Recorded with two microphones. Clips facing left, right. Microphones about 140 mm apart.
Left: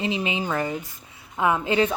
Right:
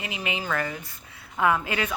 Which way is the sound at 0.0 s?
25° left (ahead or behind).